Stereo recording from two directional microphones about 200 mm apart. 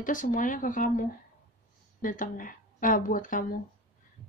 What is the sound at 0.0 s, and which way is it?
A woman's voice, 40° left (ahead or behind).